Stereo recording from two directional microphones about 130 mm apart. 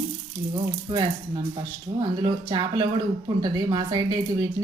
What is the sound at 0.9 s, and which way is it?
Speech, 35° right (ahead or behind).